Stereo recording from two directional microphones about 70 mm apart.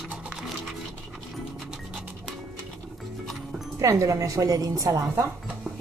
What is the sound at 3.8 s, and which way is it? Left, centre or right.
A woman's voice, right.